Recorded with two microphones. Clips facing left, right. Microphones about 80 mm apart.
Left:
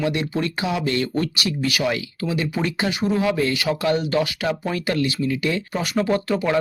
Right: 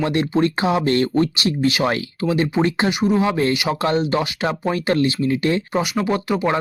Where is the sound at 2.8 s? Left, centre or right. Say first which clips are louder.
Right 3 dB; right.